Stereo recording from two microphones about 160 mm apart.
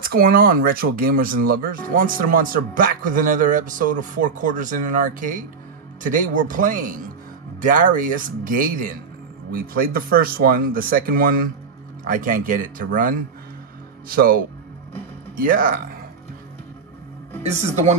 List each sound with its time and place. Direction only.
0.0 s speech: 65° right (ahead or behind)
17.5 s speech: 45° right (ahead or behind)